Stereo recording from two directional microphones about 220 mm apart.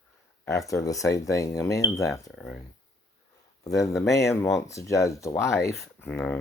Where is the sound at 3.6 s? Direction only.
15° left (ahead or behind).